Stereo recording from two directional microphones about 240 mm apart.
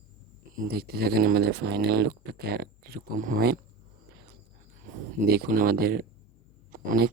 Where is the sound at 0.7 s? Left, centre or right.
Right.